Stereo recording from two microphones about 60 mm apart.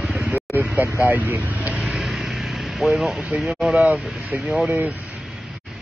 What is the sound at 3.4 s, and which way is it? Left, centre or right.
Speech, centre.